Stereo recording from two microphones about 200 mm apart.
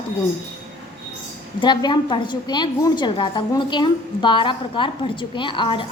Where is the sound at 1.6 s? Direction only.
20° left (ahead or behind).